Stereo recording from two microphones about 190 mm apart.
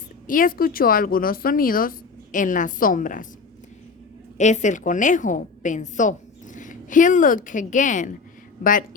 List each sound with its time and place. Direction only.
0.3 s speech: 45° left (ahead or behind)
4.4 s a woman's voice: 40° left (ahead or behind)